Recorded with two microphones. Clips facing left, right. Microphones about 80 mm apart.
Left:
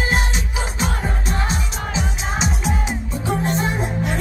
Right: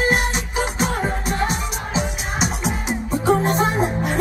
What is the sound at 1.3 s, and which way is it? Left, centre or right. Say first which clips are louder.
Music: right 2 dB; right.